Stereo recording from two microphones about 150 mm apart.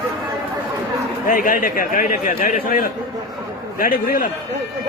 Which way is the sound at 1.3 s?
65° left (ahead or behind).